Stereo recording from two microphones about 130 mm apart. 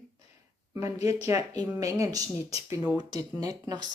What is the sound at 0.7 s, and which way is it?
Speech, 25° right (ahead or behind).